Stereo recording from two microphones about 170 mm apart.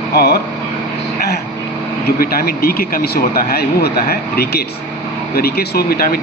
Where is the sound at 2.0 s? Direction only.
65° left (ahead or behind).